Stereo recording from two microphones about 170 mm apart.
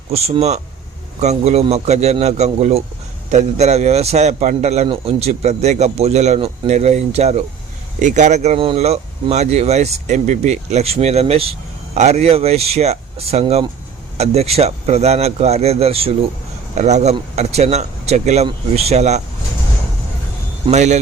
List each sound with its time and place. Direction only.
0.1 s a man's voice: 40° right (ahead or behind)
20.7 s speech: 45° right (ahead or behind)